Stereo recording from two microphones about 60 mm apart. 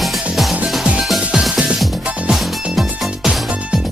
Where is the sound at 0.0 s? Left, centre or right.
Centre.